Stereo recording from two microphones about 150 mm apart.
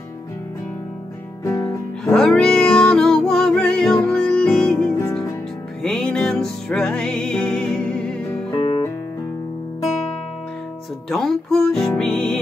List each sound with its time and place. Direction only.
1.4 s music: 20° left (ahead or behind)
2.1 s music: 5° left (ahead or behind)
8.5 s music: 35° left (ahead or behind)
11.1 s speech: centre (ahead or behind)